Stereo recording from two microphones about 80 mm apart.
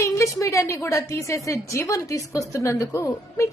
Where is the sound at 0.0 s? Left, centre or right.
Left.